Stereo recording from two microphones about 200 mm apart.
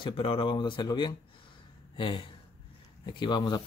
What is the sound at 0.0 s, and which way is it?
A man's voice, 25° left (ahead or behind).